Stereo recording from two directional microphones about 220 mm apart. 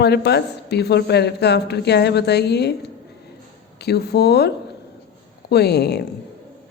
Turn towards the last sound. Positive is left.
turn(degrees=50)  # may be behind; listen again after turning